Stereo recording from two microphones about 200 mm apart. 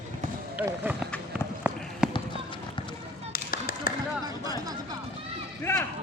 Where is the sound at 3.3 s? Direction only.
45° left (ahead or behind).